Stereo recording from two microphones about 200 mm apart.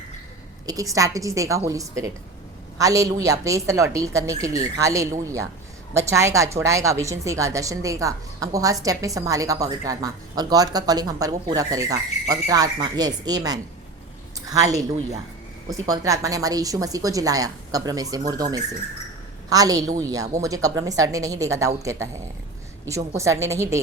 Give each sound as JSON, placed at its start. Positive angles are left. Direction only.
{"t": 0.6, "sound": "a woman's voice", "side_deg": -20}
{"t": 15.9, "sound": "a woman's voice", "side_deg": -15}